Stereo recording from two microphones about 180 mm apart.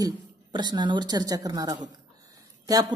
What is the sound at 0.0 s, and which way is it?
Speech, 25° right (ahead or behind).